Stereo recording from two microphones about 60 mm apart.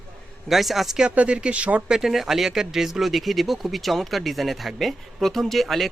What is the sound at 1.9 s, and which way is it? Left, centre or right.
Speech, centre.